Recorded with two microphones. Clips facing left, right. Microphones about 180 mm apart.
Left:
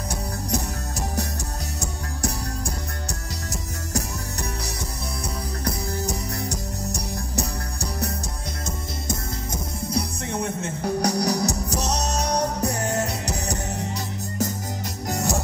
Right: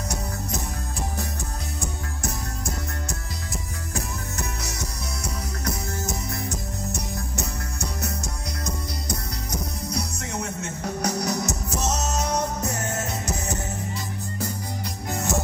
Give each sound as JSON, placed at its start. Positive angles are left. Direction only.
{"t": 0.1, "sound": "music", "side_deg": 40}
{"t": 6.0, "sound": "music", "side_deg": 35}
{"t": 15.0, "sound": "music", "side_deg": 40}